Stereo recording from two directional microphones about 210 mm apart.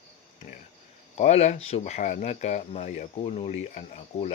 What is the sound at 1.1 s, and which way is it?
Speech, 30° left (ahead or behind).